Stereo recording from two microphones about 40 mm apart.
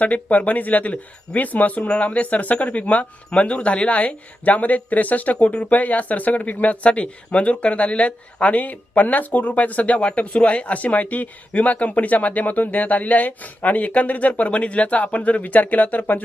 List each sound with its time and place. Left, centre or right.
0.0 s speech: left
3.2 s speech: left
10.0 s speech: left